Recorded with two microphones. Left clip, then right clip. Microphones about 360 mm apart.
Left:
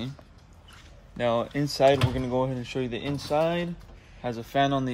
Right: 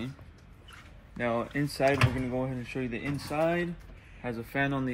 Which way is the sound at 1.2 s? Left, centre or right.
Left.